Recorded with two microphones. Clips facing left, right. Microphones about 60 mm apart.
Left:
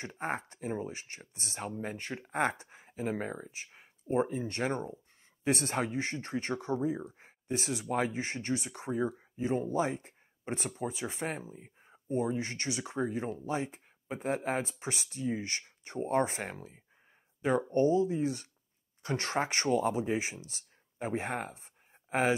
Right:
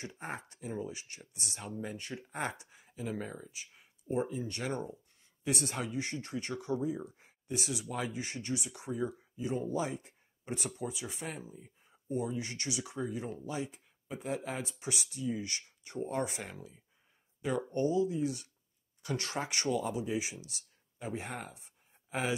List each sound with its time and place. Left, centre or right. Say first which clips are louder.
0.0 s speech: left 6 dB; left